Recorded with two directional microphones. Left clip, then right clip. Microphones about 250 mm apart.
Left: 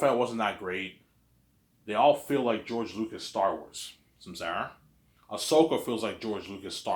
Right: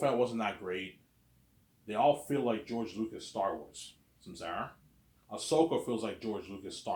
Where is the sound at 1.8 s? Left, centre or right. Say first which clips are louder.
Left 5 dB; centre.